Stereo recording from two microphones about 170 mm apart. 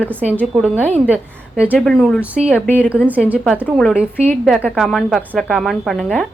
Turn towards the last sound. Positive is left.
turn(degrees=0)  # may be behind; listen again after turning